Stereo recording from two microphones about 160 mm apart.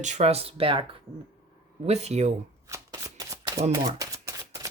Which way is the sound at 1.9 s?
45° right (ahead or behind).